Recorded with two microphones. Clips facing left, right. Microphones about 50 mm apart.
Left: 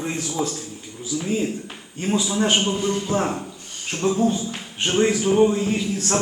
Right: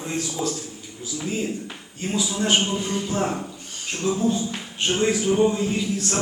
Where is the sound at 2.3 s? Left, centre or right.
Left.